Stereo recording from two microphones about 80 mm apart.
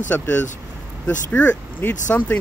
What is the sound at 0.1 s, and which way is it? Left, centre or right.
Speech, left.